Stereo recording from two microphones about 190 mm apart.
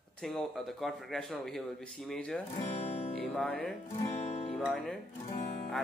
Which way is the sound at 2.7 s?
35° left (ahead or behind).